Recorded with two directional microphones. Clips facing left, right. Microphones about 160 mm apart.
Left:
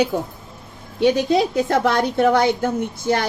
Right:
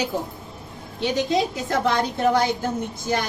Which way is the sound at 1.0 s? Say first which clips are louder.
Left 5 dB; 60° left (ahead or behind).